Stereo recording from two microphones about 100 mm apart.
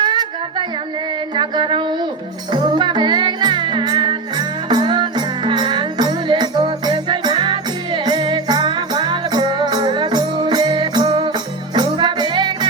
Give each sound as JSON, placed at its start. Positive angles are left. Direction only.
{"t": 0.0, "sound": "music", "side_deg": -50}